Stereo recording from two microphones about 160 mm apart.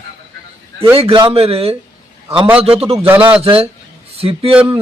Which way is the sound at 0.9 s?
35° right (ahead or behind).